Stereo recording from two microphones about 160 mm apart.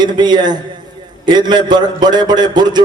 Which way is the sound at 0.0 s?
25° right (ahead or behind).